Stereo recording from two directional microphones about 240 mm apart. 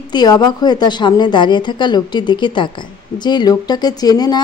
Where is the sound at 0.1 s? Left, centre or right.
Centre.